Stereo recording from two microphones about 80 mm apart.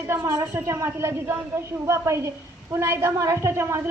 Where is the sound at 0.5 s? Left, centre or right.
Right.